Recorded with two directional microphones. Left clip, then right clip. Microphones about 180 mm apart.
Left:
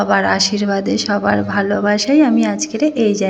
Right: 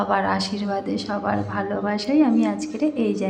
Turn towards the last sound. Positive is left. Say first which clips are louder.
# left 8 dB
turn(degrees=15)  # may be behind; listen again after turning